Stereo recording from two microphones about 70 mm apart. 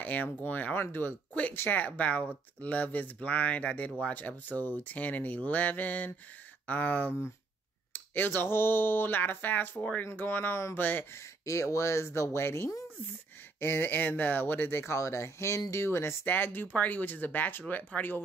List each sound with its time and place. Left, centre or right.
0.0 s speech: left
11.4 s speech: left